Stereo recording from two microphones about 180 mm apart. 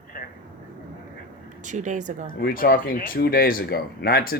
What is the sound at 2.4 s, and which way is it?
Speech, 55° left (ahead or behind).